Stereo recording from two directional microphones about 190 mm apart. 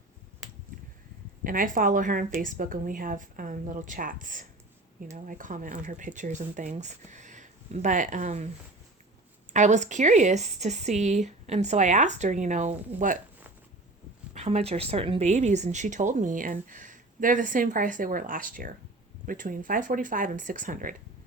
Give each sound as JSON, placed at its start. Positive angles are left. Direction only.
{"t": 1.5, "sound": "speech", "side_deg": -45}
{"t": 9.5, "sound": "speech", "side_deg": -40}
{"t": 14.3, "sound": "speech", "side_deg": -35}